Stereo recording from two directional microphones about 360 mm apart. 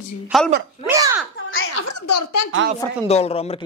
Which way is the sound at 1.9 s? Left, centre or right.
Left.